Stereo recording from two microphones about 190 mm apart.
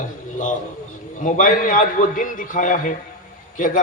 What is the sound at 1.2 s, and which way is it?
A man's voice, 45° left (ahead or behind).